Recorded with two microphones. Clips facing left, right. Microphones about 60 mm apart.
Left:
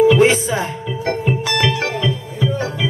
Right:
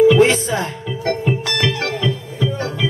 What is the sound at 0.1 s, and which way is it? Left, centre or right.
Music, centre.